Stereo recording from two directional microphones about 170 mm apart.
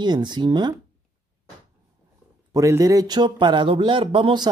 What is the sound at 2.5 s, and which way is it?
Speech, 20° right (ahead or behind).